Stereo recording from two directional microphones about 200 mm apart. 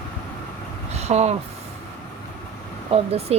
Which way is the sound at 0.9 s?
35° right (ahead or behind).